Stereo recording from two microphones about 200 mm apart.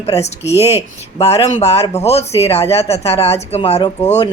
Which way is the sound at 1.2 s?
30° left (ahead or behind).